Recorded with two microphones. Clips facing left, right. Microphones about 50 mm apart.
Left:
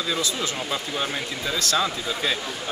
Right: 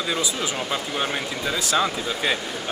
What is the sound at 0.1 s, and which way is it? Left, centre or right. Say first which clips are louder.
Speech: right 1 dB; centre.